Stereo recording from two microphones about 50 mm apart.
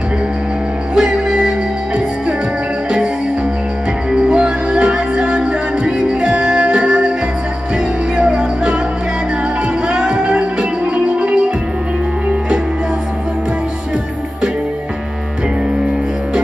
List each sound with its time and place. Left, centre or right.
0.9 s music: centre
4.1 s music: centre
8.2 s music: centre
9.8 s music: centre